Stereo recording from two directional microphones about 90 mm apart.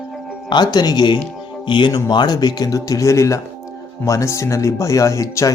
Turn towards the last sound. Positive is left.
turn(degrees=35)  # may be behind; listen again after turning